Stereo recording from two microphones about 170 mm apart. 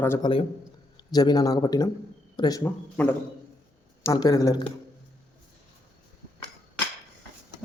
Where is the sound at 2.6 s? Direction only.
10° left (ahead or behind).